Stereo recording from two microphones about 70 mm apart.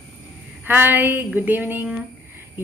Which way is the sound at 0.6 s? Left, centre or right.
Right.